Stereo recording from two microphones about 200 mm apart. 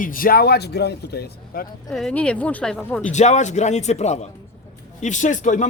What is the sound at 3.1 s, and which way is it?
A man's voice, 35° left (ahead or behind).